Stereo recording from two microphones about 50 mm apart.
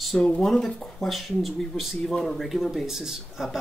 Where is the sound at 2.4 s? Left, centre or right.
Centre.